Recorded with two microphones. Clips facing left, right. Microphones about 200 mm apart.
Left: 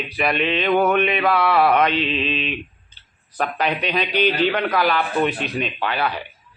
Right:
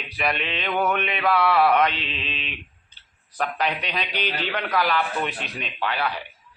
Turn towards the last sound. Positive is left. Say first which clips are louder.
# left 4 dB
turn(degrees=60)  # may be behind; listen again after turning